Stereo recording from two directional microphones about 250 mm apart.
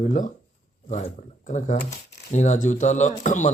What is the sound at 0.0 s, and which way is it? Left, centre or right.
Speech, left.